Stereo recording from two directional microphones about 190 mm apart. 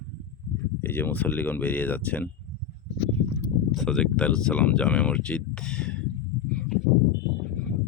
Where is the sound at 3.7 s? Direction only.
Centre (ahead or behind).